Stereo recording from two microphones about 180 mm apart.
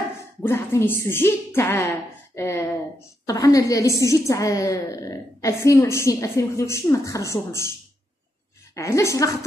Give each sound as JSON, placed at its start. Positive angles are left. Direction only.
{"t": 0.4, "sound": "a woman's voice", "side_deg": 15}
{"t": 8.7, "sound": "a woman's voice", "side_deg": 15}